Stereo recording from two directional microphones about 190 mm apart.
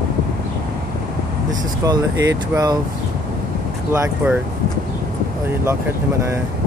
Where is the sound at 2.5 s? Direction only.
20° right (ahead or behind).